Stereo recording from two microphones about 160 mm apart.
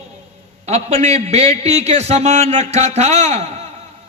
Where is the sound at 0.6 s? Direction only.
40° right (ahead or behind).